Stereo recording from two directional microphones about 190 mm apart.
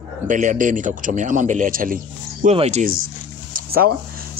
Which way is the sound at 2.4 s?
35° right (ahead or behind).